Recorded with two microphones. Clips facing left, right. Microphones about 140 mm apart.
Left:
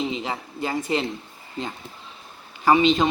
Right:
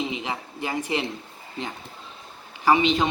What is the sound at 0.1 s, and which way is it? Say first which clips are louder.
Speech: left 2 dB; 15° right (ahead or behind).